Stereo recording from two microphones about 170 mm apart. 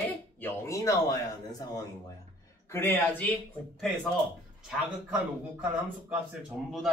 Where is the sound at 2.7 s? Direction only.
15° left (ahead or behind).